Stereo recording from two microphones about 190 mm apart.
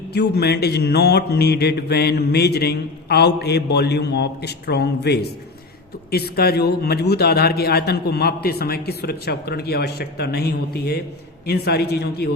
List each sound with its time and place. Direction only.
0.1 s speech: 60° left (ahead or behind)